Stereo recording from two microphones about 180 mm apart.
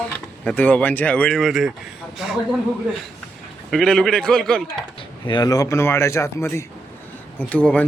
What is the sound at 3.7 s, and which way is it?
Speech, 5° left (ahead or behind).